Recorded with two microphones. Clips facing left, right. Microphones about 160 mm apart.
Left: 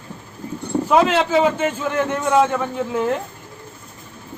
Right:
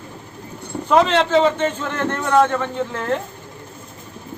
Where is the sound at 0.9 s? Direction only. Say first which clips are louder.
Right 1 dB; 5° left (ahead or behind).